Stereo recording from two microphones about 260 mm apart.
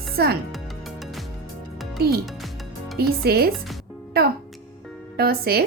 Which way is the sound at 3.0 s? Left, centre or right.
Right.